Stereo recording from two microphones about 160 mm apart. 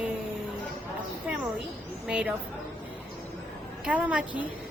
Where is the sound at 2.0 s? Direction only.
5° right (ahead or behind).